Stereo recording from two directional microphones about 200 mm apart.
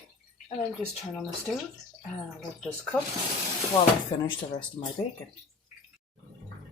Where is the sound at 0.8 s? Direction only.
Centre (ahead or behind).